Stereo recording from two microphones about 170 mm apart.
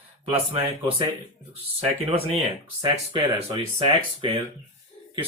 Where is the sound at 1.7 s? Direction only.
35° right (ahead or behind).